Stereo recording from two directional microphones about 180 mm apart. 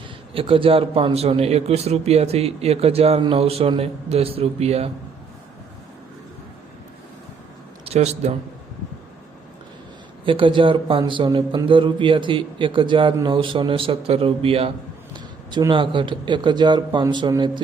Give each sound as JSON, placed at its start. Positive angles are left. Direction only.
{"t": 0.3, "sound": "speech", "side_deg": -30}
{"t": 7.9, "sound": "speech", "side_deg": -35}
{"t": 10.2, "sound": "speech", "side_deg": -30}